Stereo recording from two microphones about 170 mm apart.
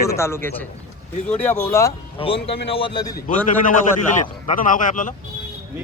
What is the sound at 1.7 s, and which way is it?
Speech, 15° left (ahead or behind).